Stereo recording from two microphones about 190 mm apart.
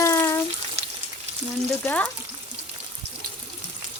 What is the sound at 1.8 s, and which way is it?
Speech, 5° left (ahead or behind).